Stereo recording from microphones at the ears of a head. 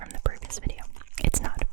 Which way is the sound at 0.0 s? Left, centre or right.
Right.